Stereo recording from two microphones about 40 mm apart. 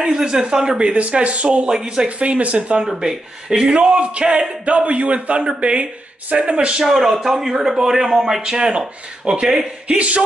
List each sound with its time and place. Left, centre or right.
0.0 s a man's voice: centre
1.7 s a man's voice: centre
2.0 s a man's voice: right
2.8 s a man's voice: centre
4.6 s a man's voice: right
6.8 s a man's voice: centre; by 10.2 s right